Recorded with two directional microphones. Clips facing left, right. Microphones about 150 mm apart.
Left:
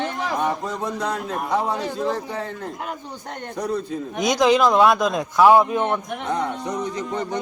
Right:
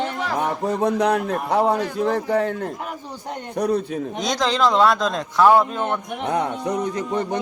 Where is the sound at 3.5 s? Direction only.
70° right (ahead or behind).